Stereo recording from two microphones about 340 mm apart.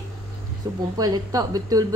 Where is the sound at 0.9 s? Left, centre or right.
Centre.